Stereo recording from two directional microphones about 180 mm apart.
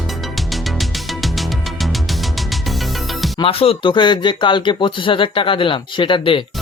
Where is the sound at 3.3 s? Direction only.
30° left (ahead or behind).